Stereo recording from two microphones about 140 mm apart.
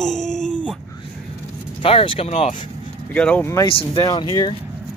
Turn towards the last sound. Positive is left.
turn(degrees=35)  # may be behind; listen again after turning